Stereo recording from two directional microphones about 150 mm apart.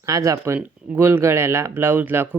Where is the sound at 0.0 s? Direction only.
20° right (ahead or behind).